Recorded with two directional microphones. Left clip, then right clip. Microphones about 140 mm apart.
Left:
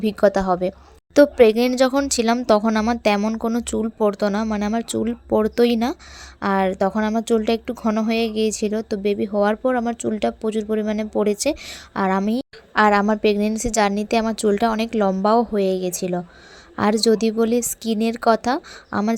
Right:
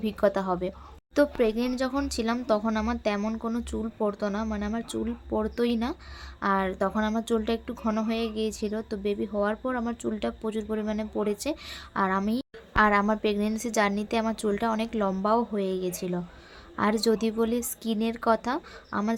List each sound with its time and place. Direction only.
0.0 s speech: 40° left (ahead or behind)
1.1 s speech: 55° left (ahead or behind)
2.5 s speech: 50° left (ahead or behind)
3.2 s speech: 40° left (ahead or behind)